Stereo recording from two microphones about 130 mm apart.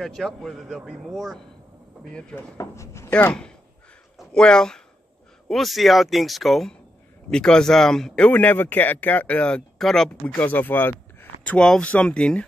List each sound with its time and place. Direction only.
0.0 s a man's voice: centre (ahead or behind)
2.5 s a man's voice: 25° left (ahead or behind); by 12.4 s 10° left (ahead or behind)